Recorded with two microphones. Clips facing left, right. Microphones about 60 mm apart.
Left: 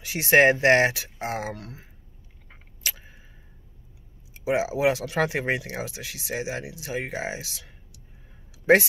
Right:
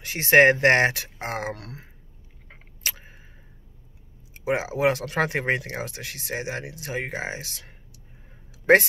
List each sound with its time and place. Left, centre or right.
0.0 s speech: right
1.5 s speech: right
2.8 s a sound: right
4.3 s speech: right